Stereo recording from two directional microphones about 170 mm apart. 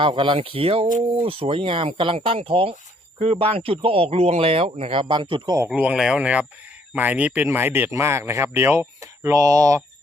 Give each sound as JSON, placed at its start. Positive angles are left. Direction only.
{"t": 0.0, "sound": "speech", "side_deg": -30}
{"t": 5.5, "sound": "speech", "side_deg": -10}